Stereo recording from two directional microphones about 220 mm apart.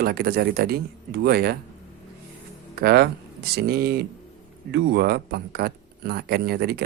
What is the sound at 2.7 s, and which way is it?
Speech, 45° right (ahead or behind).